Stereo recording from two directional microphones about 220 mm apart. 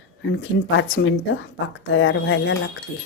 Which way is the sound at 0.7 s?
60° left (ahead or behind).